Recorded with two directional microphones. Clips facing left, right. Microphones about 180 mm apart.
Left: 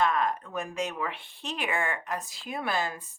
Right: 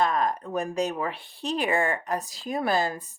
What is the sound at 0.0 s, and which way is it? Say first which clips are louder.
Speech: right 2 dB; 35° right (ahead or behind).